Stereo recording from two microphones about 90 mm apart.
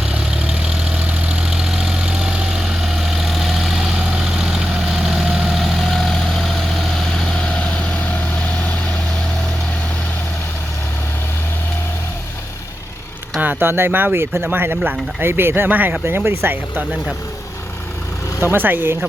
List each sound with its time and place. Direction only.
0.1 s vehicle: 10° right (ahead or behind)
13.4 s speech: 20° right (ahead or behind)
18.4 s speech: 25° right (ahead or behind)